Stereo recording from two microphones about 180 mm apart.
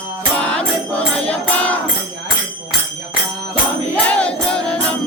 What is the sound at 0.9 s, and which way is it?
Music, 5° left (ahead or behind).